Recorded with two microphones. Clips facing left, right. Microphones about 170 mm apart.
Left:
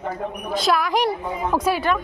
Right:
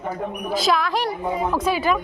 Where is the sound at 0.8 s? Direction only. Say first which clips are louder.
Left 2 dB; 15° left (ahead or behind).